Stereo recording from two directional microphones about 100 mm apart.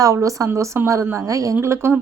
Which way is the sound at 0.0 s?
35° right (ahead or behind).